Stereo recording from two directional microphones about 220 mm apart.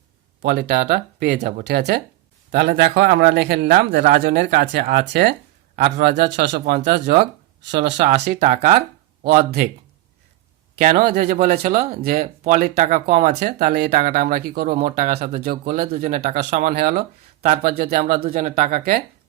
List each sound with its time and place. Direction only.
0.4 s speech: 45° right (ahead or behind)
2.6 s speech: 50° right (ahead or behind)
8.4 s speech: 35° right (ahead or behind)
10.8 s speech: 40° right (ahead or behind)